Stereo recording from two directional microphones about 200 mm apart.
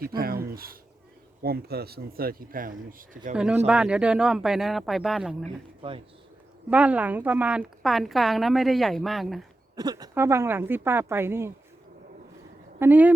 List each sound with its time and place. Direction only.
0.5 s speech: 50° right (ahead or behind)
3.3 s a woman's voice: 5° right (ahead or behind)
6.7 s a woman's voice: 5° right (ahead or behind)
9.7 s speech: 20° right (ahead or behind)
12.8 s speech: 10° right (ahead or behind)